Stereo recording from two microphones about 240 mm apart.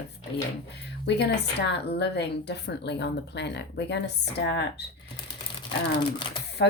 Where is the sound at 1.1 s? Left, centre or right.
Left.